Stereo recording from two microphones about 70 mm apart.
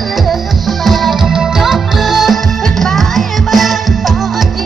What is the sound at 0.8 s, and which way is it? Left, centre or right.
Music, centre.